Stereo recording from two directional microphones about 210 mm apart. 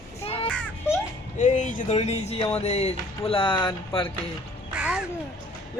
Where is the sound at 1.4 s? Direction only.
35° left (ahead or behind).